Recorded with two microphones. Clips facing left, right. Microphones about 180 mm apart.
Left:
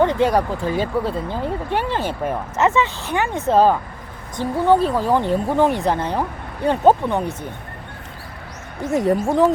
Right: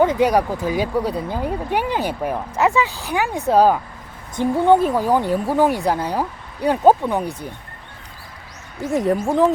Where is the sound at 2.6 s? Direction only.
5° right (ahead or behind).